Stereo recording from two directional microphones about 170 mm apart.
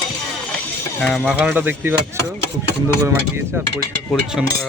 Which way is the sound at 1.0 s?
Centre (ahead or behind).